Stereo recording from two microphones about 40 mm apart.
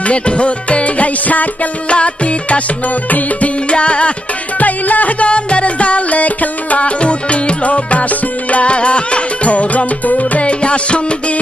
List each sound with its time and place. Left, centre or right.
0.0 s music: left
1.9 s music: left
3.1 s music: left
3.7 s music: left
4.6 s music: left